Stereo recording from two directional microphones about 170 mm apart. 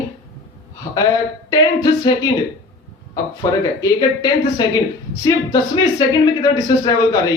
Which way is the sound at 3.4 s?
20° left (ahead or behind).